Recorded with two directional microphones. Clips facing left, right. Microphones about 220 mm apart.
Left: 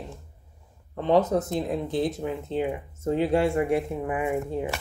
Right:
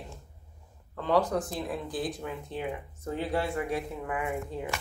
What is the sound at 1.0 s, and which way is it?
Speech, 20° left (ahead or behind).